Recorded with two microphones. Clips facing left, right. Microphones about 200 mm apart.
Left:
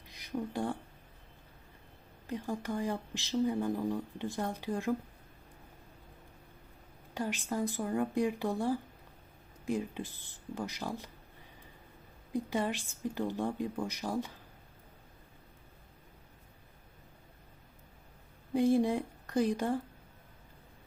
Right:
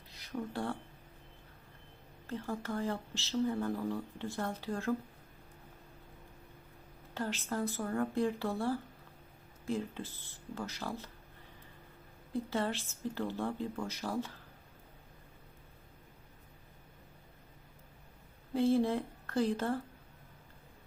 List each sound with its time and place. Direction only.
0.1 s speech: 15° left (ahead or behind)
2.2 s speech: 15° left (ahead or behind)
7.1 s speech: 15° left (ahead or behind)
12.3 s speech: 15° left (ahead or behind)
18.5 s speech: 15° left (ahead or behind)